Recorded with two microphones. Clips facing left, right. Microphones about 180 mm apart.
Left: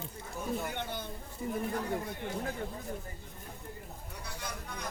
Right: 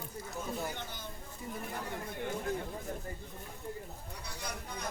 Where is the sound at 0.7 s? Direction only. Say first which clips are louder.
Left 6 dB; 60° left (ahead or behind).